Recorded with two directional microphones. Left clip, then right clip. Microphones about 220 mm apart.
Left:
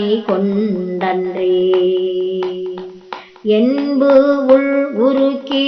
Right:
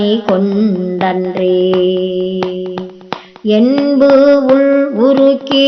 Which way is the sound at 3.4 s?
20° right (ahead or behind).